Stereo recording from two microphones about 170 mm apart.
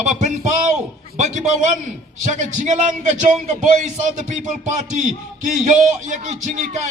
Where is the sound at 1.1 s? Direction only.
45° right (ahead or behind).